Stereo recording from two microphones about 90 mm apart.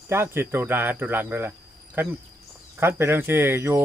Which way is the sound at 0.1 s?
25° right (ahead or behind).